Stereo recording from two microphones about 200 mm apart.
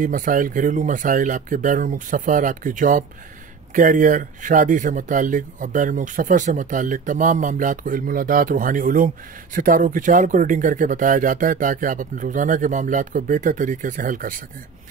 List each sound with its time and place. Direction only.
0.0 s speech: 45° right (ahead or behind)